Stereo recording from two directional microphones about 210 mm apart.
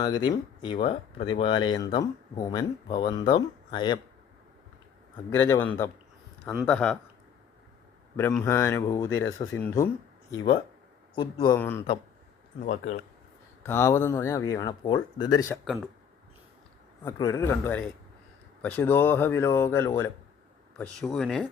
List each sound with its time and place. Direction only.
0.0 s speech: 20° left (ahead or behind)
5.3 s speech: 10° left (ahead or behind)
8.1 s speech: 5° left (ahead or behind)
11.1 s speech: 20° left (ahead or behind)
13.6 s speech: 10° left (ahead or behind)
15.6 s speech: centre (ahead or behind)
17.0 s speech: 15° left (ahead or behind)